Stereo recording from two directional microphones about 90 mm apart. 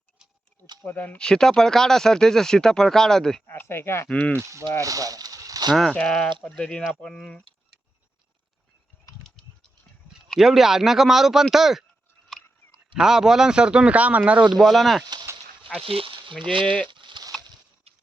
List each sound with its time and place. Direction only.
0.9 s speech: 15° left (ahead or behind)
3.4 s speech: 25° left (ahead or behind)
4.3 s speech: 30° right (ahead or behind)
4.8 s a sound: 40° right (ahead or behind)
5.7 s speech: 5° left (ahead or behind)
10.2 s speech: centre (ahead or behind)
12.9 s speech: 5° right (ahead or behind)
14.5 s speech: 5° right (ahead or behind)
15.8 s a sound: 90° right; by 16.3 s 75° right (ahead or behind)
16.4 s speech: 70° right (ahead or behind)
16.6 s speech: 10° left (ahead or behind)
16.9 s a sound: 60° right (ahead or behind)